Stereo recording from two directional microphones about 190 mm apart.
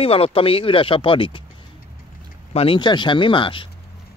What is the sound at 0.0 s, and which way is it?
Speech, 30° left (ahead or behind).